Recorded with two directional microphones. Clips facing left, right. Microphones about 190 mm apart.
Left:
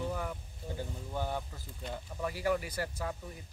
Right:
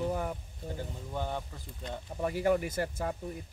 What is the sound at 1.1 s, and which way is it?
Speech, 5° left (ahead or behind).